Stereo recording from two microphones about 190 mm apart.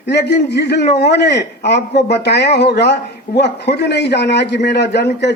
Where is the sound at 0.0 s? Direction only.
65° left (ahead or behind).